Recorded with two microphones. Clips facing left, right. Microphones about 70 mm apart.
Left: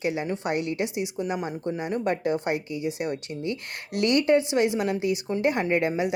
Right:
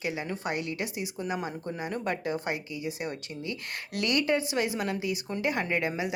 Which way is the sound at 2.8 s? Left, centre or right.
Right.